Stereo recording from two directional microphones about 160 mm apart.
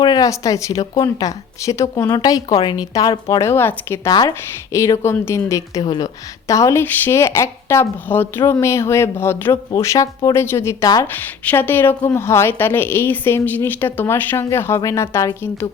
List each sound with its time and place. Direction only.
0.0 s a woman's voice: 25° left (ahead or behind)